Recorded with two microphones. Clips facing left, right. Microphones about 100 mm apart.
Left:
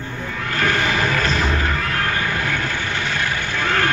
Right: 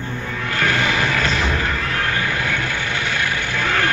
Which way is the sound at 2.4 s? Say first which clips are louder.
Even; 35° left (ahead or behind).